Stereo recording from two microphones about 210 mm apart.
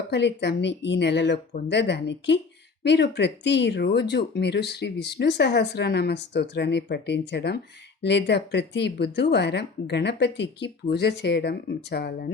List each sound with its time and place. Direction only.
0.1 s speech: 55° left (ahead or behind)